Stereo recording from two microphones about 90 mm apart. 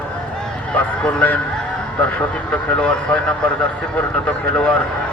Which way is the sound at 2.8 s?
10° left (ahead or behind).